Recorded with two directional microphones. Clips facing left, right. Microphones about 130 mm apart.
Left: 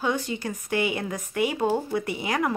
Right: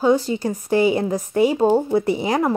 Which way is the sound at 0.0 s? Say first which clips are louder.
Right 9 dB; 35° right (ahead or behind).